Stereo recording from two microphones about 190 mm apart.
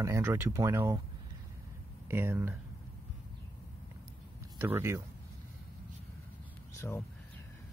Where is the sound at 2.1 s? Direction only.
10° right (ahead or behind).